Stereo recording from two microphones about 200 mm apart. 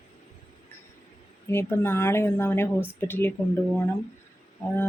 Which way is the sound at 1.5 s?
10° left (ahead or behind).